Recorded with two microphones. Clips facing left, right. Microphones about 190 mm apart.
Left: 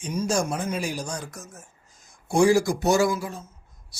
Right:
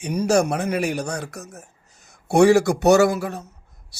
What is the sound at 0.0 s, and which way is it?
Speech, 65° right (ahead or behind).